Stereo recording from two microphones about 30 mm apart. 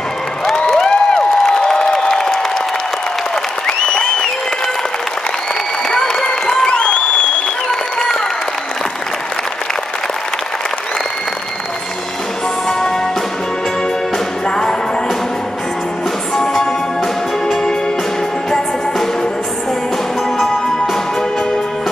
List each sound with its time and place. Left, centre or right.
0.7 s a sound: centre
3.6 s applause: left
5.9 s applause: centre
6.2 s applause: left
14.5 s music: left